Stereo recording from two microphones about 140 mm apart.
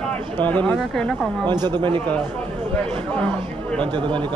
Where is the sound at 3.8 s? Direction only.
35° right (ahead or behind).